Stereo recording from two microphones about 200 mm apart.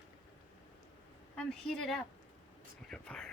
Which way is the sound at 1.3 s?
Centre (ahead or behind).